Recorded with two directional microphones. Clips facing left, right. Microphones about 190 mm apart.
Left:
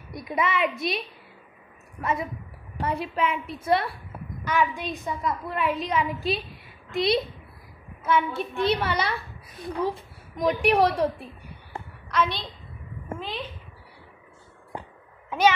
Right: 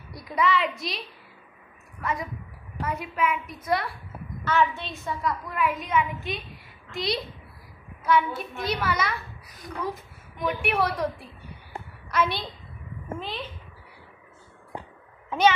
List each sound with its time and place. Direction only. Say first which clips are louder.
0.1 s a woman's voice: right 2 dB; 20° left (ahead or behind)
4.5 s a woman's voice: right 1 dB; 15° left (ahead or behind); by 11.1 s 35° left (ahead or behind)
12.1 s a woman's voice: even; 5° right (ahead or behind)
15.2 s a sound: even; 10° left (ahead or behind)